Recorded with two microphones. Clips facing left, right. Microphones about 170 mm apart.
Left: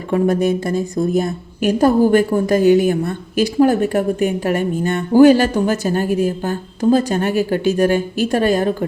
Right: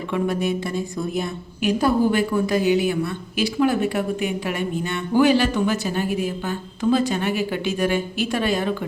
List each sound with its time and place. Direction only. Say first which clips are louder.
0.1 s a woman's voice: left 7 dB; 45° left (ahead or behind)